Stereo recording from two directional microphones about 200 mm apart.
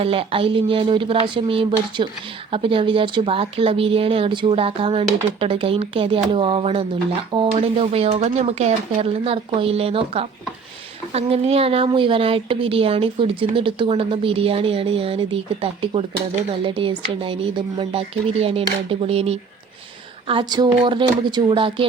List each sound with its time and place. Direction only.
0.0 s speech: 25° right (ahead or behind)